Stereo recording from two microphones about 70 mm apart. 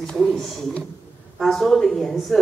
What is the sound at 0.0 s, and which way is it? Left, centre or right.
A woman's voice, centre.